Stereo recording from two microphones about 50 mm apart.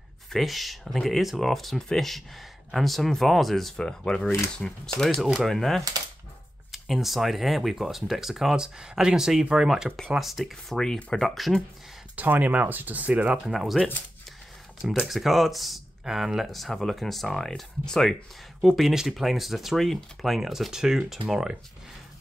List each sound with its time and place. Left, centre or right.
0.3 s speech: centre
3.7 s speech: centre
5.5 s speech: centre
10.4 s speech: centre
12.2 s speech: right
13.5 s speech: centre
18.6 s speech: centre